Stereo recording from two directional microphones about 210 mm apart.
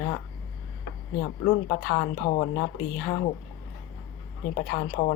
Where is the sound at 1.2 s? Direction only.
55° left (ahead or behind).